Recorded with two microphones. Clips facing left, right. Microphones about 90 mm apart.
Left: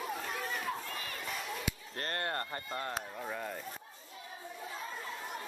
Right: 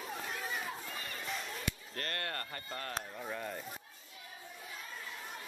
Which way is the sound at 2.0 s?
30° left (ahead or behind).